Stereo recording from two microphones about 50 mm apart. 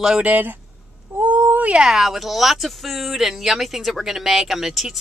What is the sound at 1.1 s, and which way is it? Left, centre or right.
Speech, right.